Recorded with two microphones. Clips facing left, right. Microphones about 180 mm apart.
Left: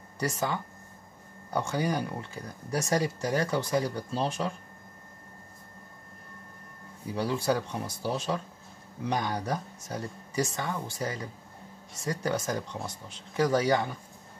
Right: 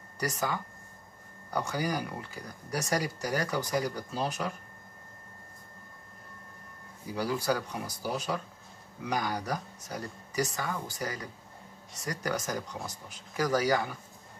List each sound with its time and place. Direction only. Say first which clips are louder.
0.2 s speech: left 2 dB; 25° left (ahead or behind)
7.2 s speech: left 2 dB; 25° left (ahead or behind)